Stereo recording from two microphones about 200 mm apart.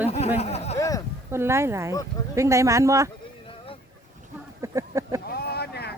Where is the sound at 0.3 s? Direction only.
30° left (ahead or behind).